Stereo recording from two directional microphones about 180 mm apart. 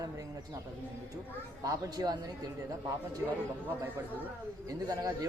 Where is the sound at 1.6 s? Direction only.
20° right (ahead or behind).